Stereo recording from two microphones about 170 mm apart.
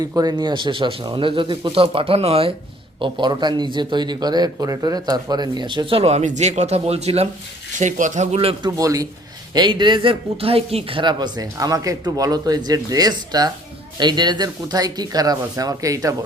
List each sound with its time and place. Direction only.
0.0 s speech: 20° right (ahead or behind)
8.8 s speech: 20° right (ahead or behind)